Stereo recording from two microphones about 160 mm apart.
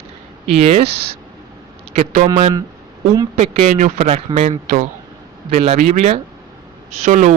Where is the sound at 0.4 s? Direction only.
40° right (ahead or behind).